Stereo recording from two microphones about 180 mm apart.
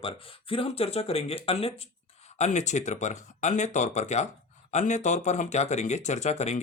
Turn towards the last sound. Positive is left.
turn(degrees=40)  # may be behind; listen again after turning